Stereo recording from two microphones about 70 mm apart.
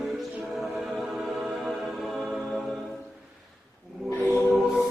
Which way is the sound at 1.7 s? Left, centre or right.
Centre.